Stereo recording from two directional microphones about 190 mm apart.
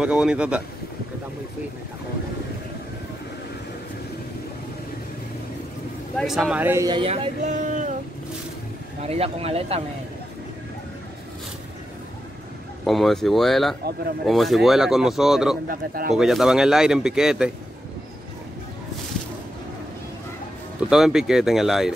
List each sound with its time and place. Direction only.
0.0 s speech: 5° right (ahead or behind)
6.1 s speech: centre (ahead or behind)
7.0 s speech: 30° right (ahead or behind)
9.0 s speech: 30° right (ahead or behind)
12.8 s speech: centre (ahead or behind)
15.7 s speech: 50° right (ahead or behind)
16.2 s speech: centre (ahead or behind)
20.9 s speech: centre (ahead or behind)